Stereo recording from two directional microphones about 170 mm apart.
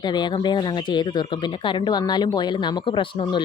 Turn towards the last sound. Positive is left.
turn(degrees=30)  # may be behind; listen again after turning